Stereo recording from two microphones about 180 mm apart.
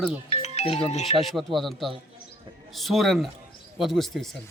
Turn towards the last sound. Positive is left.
turn(degrees=0)  # may be behind; listen again after turning